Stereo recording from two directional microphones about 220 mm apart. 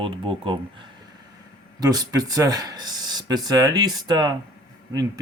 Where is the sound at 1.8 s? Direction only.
15° right (ahead or behind).